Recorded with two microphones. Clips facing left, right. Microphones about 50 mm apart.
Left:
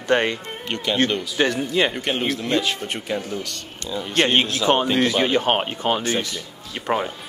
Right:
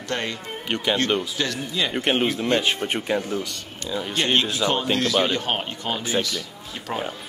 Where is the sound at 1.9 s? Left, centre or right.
Right.